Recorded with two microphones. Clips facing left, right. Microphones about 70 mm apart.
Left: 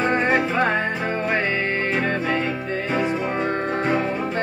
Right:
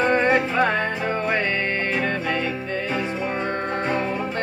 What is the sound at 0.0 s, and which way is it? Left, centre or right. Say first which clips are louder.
Music: right 1 dB; centre.